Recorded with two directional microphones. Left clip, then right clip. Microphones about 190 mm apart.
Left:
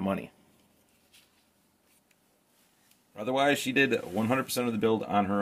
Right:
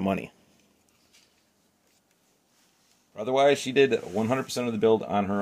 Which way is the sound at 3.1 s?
30° right (ahead or behind).